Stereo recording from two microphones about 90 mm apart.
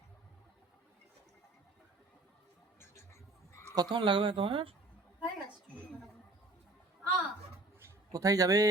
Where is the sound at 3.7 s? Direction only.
45° right (ahead or behind).